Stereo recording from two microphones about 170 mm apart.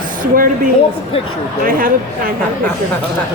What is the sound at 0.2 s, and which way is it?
A woman's voice, 55° right (ahead or behind).